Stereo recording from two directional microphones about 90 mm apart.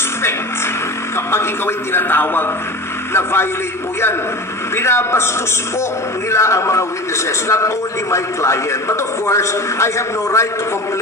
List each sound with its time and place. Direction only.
1.3 s a man's voice: 25° left (ahead or behind)
4.7 s a man's voice: 30° left (ahead or behind)
6.3 s a man's voice: 30° left (ahead or behind)